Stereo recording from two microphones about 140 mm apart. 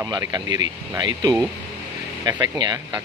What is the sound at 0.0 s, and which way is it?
Speech, 30° right (ahead or behind).